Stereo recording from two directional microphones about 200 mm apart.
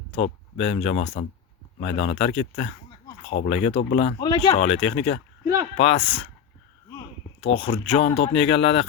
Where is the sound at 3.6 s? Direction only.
30° left (ahead or behind).